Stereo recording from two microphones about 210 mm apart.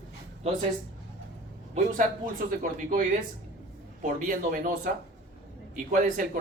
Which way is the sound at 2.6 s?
35° right (ahead or behind).